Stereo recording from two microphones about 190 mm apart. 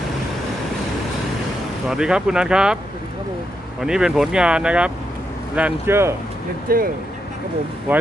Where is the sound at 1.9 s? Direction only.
5° right (ahead or behind).